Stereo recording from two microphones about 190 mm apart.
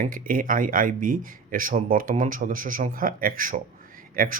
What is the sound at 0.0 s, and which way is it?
A man's voice, 45° right (ahead or behind).